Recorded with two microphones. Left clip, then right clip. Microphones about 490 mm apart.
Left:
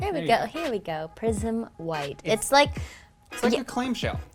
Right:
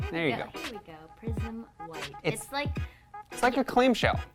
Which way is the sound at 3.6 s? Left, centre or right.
Right.